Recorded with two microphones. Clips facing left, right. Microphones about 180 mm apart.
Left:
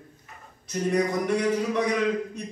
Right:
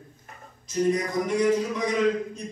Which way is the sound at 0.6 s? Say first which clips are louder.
Even; 65° left (ahead or behind).